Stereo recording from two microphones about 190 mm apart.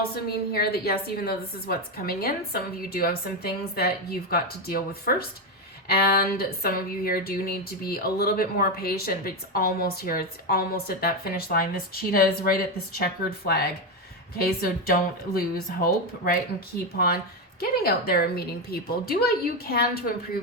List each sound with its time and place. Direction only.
0.5 s speech: 55° left (ahead or behind)
17.6 s speech: 55° left (ahead or behind)